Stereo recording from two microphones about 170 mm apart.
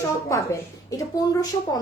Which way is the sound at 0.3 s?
15° left (ahead or behind).